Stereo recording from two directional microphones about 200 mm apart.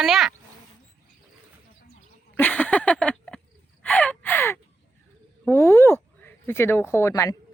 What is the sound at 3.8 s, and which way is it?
Gasp, 5° left (ahead or behind).